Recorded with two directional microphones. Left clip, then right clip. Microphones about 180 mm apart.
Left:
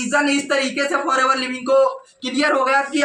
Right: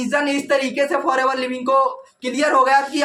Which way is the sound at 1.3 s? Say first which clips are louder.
Left 1 dB; 30° right (ahead or behind).